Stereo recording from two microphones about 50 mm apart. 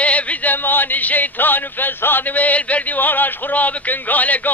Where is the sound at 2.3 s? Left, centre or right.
Left.